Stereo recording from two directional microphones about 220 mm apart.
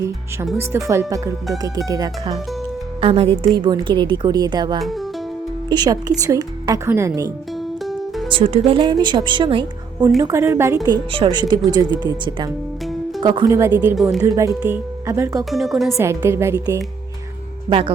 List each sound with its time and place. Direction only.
0.9 s a woman's voice: 15° right (ahead or behind)
4.8 s a woman's voice: centre (ahead or behind)
5.6 s a woman's voice: 20° right (ahead or behind)
7.9 s music: centre (ahead or behind)
8.3 s a woman's voice: 25° right (ahead or behind)
13.9 s a woman's voice: centre (ahead or behind)
14.2 s a woman's voice: 15° right (ahead or behind)
15.4 s a woman's voice: centre (ahead or behind)
16.0 s a woman's voice: 10° right (ahead or behind)
17.7 s a woman's voice: 25° right (ahead or behind)